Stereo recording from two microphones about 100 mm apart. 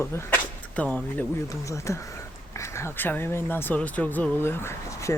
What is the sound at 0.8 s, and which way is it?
Speech, 10° left (ahead or behind).